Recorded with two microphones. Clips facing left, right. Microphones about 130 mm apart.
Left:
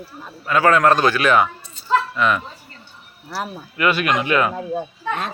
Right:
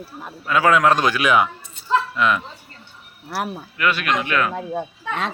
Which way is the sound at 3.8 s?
5° left (ahead or behind).